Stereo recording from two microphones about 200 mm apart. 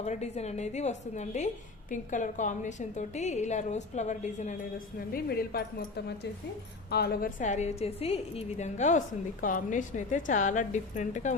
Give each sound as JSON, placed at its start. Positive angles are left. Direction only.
{"t": 0.0, "sound": "a woman's voice", "side_deg": 35}
{"t": 4.9, "sound": "a woman's voice", "side_deg": 45}
{"t": 6.9, "sound": "a woman's voice", "side_deg": 55}